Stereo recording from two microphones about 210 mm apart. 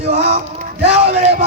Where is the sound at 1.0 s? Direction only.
30° right (ahead or behind).